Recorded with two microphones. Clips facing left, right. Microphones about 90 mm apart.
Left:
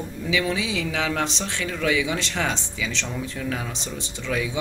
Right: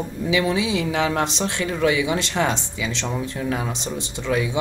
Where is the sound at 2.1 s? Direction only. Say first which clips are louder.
Right 4 dB; 40° right (ahead or behind).